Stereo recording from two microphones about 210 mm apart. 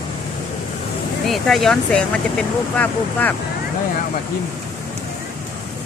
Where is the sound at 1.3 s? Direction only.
Centre (ahead or behind).